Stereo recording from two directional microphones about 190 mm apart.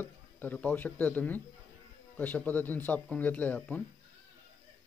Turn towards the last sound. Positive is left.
turn(degrees=10)  # may be behind; listen again after turning